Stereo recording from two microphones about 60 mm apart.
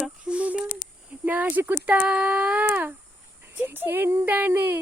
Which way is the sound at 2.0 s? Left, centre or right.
Centre.